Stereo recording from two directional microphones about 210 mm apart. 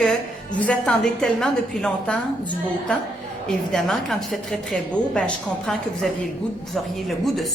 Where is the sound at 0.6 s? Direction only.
5° left (ahead or behind).